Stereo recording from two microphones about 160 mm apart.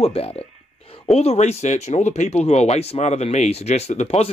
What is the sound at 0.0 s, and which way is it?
Speech, 40° left (ahead or behind).